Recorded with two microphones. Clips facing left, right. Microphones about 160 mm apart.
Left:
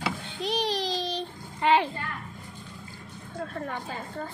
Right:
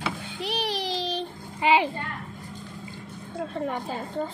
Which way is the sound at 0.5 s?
10° right (ahead or behind).